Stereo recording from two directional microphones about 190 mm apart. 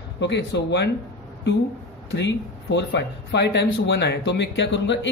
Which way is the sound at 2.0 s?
65° left (ahead or behind).